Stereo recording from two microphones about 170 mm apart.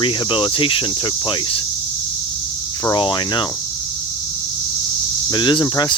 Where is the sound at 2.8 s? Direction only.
25° left (ahead or behind).